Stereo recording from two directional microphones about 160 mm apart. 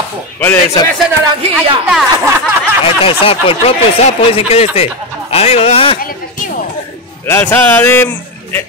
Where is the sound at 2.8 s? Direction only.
35° left (ahead or behind).